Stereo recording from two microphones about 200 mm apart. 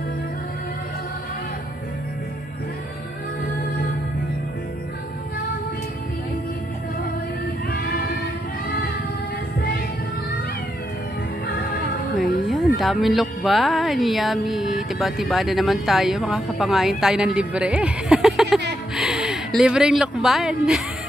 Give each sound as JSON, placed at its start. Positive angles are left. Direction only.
{"t": 7.7, "sound": "music", "side_deg": 50}
{"t": 11.4, "sound": "music", "side_deg": 50}
{"t": 12.2, "sound": "music", "side_deg": 0}
{"t": 12.7, "sound": "speech", "side_deg": 0}